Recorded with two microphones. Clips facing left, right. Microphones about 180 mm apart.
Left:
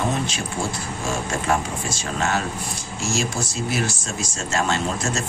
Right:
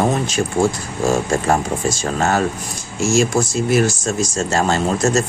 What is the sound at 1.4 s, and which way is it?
Speech, 40° right (ahead or behind).